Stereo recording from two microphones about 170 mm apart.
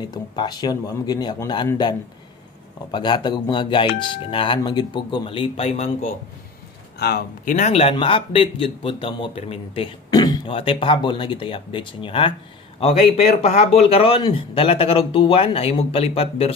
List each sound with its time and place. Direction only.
0.0 s speech: 25° left (ahead or behind)
2.9 s speech: 25° left (ahead or behind); by 6.1 s 40° left (ahead or behind)
7.0 s speech: 70° left (ahead or behind)
7.5 s speech: 40° left (ahead or behind)
10.1 s speech: 25° left (ahead or behind)